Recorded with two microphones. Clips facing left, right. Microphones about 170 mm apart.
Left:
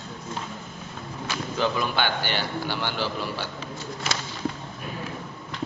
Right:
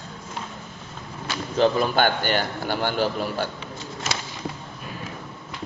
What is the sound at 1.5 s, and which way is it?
A man's voice, 35° right (ahead or behind).